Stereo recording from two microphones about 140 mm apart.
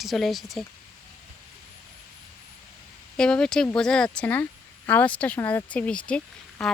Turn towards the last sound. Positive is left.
turn(degrees=5)  # may be behind; listen again after turning